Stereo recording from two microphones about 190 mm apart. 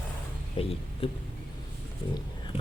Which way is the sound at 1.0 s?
30° left (ahead or behind).